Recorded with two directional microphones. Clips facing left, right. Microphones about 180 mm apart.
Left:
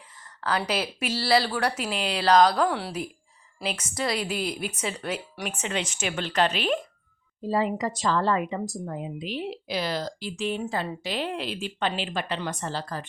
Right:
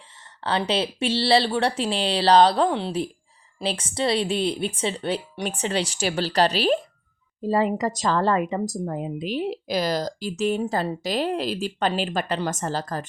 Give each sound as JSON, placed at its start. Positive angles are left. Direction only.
{"t": 0.4, "sound": "speech", "side_deg": -25}
{"t": 7.4, "sound": "speech", "side_deg": -50}